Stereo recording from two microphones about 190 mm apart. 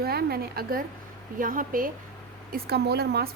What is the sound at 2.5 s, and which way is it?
Speech, 55° right (ahead or behind).